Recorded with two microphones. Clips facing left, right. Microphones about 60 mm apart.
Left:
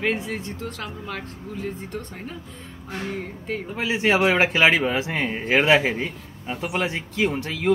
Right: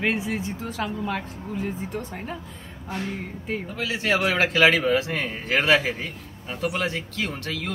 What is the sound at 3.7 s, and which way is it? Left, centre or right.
A man's voice, left.